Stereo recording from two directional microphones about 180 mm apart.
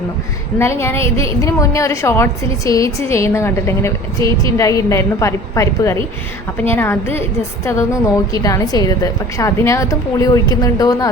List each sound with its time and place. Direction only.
0.6 s a woman's voice: 15° left (ahead or behind)